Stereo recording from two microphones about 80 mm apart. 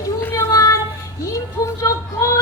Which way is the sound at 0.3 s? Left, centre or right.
Left.